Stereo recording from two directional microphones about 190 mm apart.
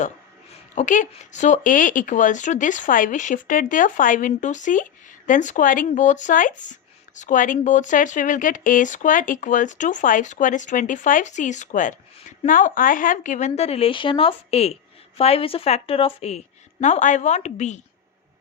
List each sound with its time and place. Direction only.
0.8 s speech: 40° left (ahead or behind)